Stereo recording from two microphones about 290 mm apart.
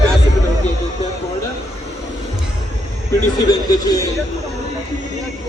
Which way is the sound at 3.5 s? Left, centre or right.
Centre.